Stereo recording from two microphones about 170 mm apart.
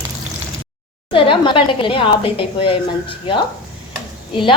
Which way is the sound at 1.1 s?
30° left (ahead or behind).